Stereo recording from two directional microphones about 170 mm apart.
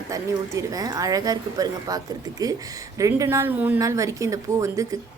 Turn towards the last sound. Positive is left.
turn(degrees=-20)  # may be behind; listen again after turning